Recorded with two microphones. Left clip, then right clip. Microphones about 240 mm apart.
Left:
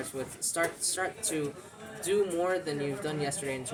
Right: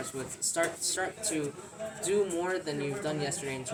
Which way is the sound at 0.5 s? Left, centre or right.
Centre.